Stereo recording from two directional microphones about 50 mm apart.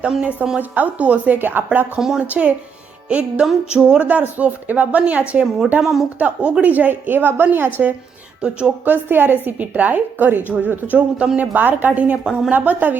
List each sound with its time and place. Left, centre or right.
0.2 s a woman's voice: right
2.0 s speech: centre
2.2 s a woman's voice: right
4.0 s a woman's voice: right
5.8 s speech: centre
6.1 s a woman's voice: right
6.7 s a woman's voice: right
8.4 s speech: centre
8.8 s a woman's voice: right
12.2 s speech: centre
12.5 s a woman's voice: right